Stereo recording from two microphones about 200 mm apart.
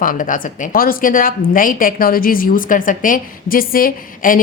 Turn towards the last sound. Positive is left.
turn(degrees=45)  # may be behind; listen again after turning